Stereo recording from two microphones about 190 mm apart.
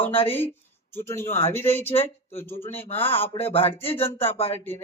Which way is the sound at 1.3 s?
30° left (ahead or behind).